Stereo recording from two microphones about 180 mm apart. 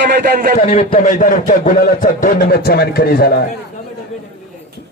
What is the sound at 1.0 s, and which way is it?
A man's voice, 45° left (ahead or behind).